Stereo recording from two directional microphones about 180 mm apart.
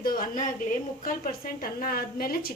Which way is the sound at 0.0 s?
55° left (ahead or behind).